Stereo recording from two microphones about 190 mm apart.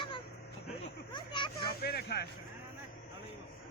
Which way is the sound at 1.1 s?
25° left (ahead or behind).